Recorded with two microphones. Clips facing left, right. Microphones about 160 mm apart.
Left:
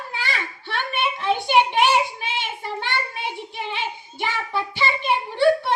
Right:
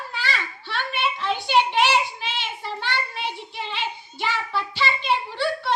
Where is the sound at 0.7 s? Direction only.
55° left (ahead or behind).